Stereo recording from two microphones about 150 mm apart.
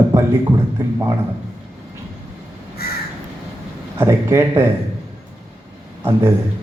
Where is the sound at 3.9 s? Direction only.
15° right (ahead or behind).